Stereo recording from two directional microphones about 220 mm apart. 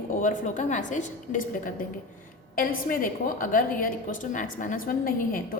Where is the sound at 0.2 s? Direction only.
35° left (ahead or behind).